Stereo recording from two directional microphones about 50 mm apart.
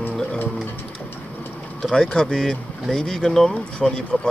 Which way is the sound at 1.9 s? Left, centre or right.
Centre.